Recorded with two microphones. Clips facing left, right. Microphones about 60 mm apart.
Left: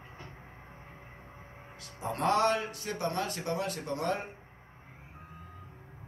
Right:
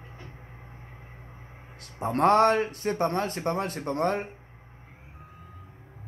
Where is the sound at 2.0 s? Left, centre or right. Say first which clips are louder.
Right 7 dB; right.